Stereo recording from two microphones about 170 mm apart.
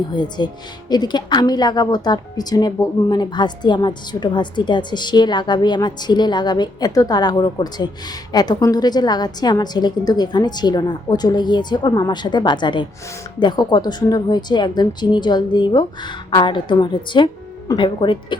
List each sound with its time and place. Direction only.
0.1 s a woman's voice: 25° left (ahead or behind)